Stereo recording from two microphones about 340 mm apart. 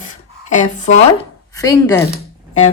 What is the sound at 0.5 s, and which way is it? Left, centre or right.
Speech, left.